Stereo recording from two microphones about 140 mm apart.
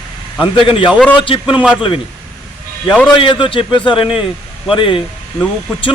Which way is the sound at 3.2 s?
35° left (ahead or behind).